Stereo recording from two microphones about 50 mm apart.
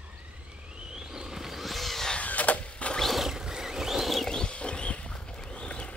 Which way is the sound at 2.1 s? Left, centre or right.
Left.